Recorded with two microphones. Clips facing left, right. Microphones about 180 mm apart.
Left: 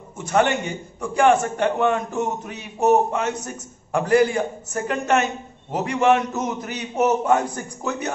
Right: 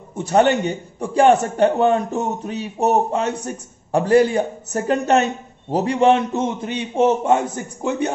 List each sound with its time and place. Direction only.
0.1 s a man's voice: 35° right (ahead or behind)